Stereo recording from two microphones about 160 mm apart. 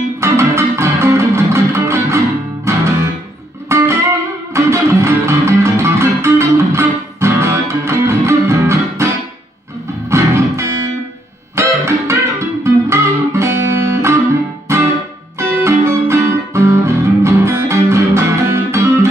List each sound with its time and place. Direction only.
0.2 s music: 15° right (ahead or behind)